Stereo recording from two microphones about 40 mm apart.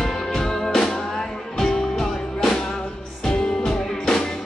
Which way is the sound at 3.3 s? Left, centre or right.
Left.